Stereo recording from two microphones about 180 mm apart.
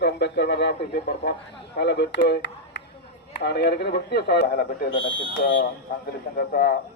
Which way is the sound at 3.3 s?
65° left (ahead or behind).